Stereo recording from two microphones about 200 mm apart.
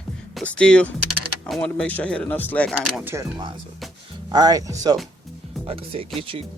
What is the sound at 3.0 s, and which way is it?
Speech, 10° right (ahead or behind).